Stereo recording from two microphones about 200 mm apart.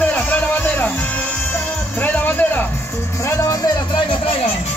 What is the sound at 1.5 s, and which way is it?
Music, 10° left (ahead or behind).